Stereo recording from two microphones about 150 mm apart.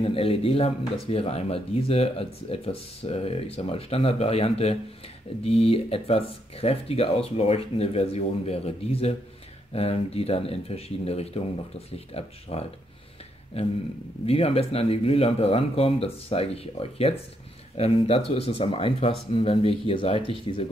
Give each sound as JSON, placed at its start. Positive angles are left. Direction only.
{"t": 0.0, "sound": "speech", "side_deg": 40}